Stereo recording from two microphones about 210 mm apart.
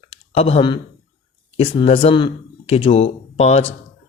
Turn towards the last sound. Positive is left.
turn(degrees=30)  # may be behind; listen again after turning